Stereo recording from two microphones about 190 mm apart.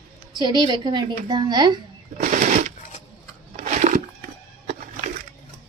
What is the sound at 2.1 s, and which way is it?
Machine gun, 45° right (ahead or behind).